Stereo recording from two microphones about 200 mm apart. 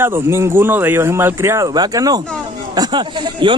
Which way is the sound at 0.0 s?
10° right (ahead or behind).